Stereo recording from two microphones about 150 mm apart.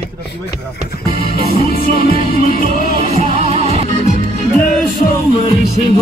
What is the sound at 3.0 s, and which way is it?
Music, 50° right (ahead or behind).